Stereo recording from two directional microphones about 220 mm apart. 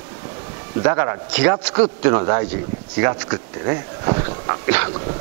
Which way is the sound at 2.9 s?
20° right (ahead or behind).